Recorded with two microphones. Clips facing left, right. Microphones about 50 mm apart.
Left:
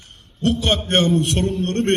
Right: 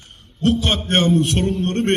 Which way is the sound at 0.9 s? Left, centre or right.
Right.